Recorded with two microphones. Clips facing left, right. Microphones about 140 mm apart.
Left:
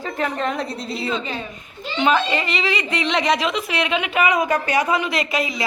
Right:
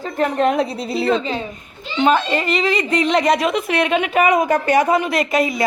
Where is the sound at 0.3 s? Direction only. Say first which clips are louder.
Right 7 dB; 55° right (ahead or behind).